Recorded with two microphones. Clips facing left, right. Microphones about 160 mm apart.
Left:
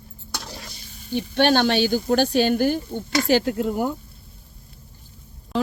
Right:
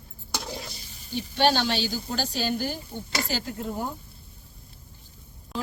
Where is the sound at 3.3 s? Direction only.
70° left (ahead or behind).